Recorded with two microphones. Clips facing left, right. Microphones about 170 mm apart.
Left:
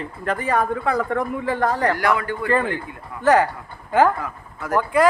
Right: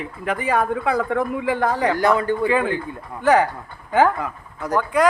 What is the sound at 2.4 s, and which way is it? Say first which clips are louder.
Speech: right 2 dB; 5° right (ahead or behind).